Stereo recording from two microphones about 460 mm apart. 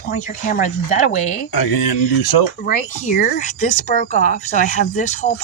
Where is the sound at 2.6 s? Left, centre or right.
Centre.